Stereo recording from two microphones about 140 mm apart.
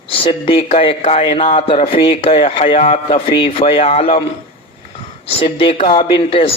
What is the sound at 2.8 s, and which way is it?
Speech, 50° left (ahead or behind).